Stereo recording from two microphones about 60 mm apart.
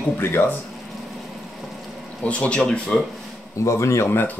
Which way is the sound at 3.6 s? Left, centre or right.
Left.